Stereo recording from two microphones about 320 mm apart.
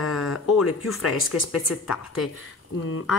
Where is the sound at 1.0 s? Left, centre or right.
Left.